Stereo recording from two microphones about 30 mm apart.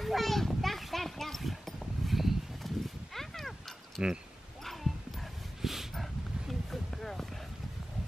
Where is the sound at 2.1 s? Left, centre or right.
Centre.